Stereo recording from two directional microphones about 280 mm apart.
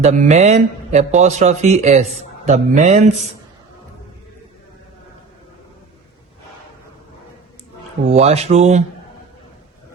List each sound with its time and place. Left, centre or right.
0.0 s a man's voice: right
8.1 s a man's voice: right